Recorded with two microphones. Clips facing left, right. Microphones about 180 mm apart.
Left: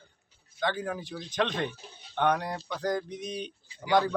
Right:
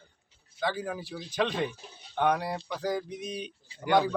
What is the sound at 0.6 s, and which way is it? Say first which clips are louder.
A man's voice: left 1 dB; 5° right (ahead or behind).